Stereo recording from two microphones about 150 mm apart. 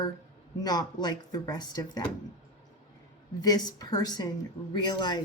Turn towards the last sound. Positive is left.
turn(degrees=30)  # may be behind; listen again after turning